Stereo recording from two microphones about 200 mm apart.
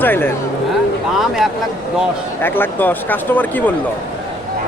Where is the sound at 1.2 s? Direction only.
Centre (ahead or behind).